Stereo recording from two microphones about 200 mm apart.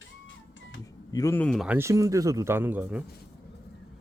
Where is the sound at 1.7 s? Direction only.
15° right (ahead or behind).